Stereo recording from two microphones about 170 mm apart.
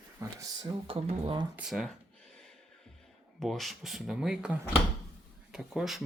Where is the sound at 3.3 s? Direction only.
Centre (ahead or behind).